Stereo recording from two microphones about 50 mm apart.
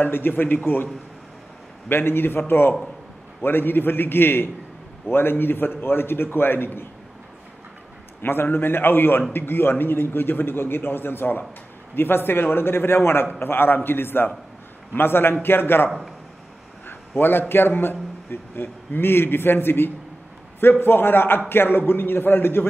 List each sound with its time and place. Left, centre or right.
0.0 s a man's voice: left
1.9 s a man's voice: left
8.2 s a man's voice: left